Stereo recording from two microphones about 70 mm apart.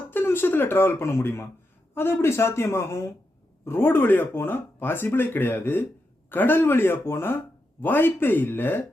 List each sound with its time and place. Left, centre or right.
0.1 s speech: left